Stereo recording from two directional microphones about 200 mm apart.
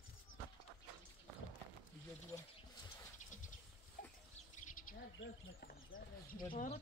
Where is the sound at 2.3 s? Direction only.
20° left (ahead or behind).